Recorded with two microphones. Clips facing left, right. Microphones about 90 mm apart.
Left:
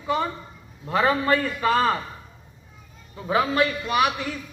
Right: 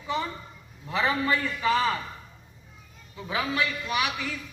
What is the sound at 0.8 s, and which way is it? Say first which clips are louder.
A man's voice: left 5 dB; 45° left (ahead or behind).